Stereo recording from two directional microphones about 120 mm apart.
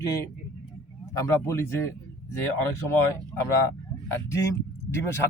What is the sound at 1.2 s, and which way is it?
Speech, 20° left (ahead or behind).